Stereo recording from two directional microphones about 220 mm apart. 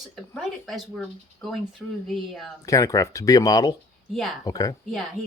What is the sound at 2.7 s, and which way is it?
Speech, 15° left (ahead or behind).